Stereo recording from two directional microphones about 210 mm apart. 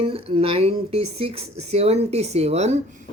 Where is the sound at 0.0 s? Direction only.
25° right (ahead or behind).